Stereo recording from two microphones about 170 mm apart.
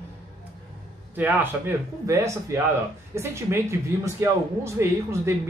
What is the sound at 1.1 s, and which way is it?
Speech, 10° right (ahead or behind).